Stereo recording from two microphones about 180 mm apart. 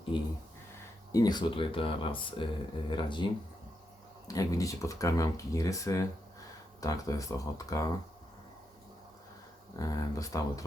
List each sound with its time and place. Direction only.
0.1 s speech: 25° left (ahead or behind)
4.3 s speech: 20° left (ahead or behind)
9.7 s speech: 20° left (ahead or behind)